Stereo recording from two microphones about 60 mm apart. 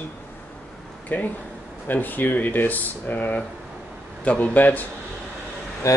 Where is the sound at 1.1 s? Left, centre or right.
Left.